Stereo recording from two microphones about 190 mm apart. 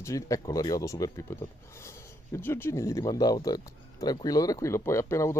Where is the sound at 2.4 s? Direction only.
10° left (ahead or behind).